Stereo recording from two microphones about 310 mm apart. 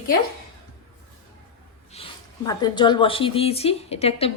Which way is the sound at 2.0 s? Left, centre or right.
Centre.